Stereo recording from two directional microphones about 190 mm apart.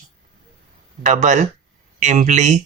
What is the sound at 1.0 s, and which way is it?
Speech, 40° right (ahead or behind).